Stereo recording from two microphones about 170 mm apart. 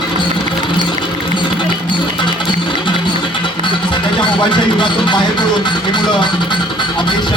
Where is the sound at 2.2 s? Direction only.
30° left (ahead or behind).